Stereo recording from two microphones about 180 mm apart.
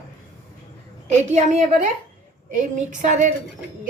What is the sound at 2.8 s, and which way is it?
Speech, 45° right (ahead or behind).